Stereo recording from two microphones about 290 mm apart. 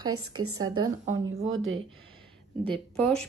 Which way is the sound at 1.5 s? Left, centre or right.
Right.